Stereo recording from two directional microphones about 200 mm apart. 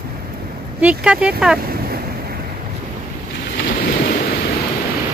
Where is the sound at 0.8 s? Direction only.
5° right (ahead or behind).